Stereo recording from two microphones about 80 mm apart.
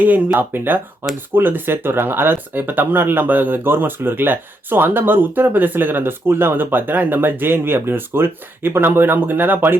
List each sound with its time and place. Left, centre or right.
0.3 s speech: right